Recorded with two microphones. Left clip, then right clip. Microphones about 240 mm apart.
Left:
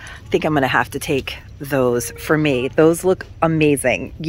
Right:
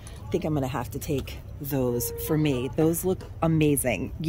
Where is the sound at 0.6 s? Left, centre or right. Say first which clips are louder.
Left 14 dB; left.